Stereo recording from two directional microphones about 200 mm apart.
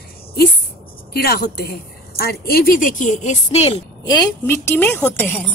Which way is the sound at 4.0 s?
20° left (ahead or behind).